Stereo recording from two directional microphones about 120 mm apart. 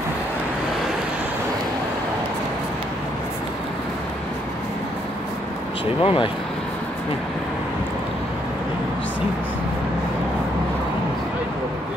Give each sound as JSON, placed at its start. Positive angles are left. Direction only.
{"t": 6.0, "sound": "speech", "side_deg": 45}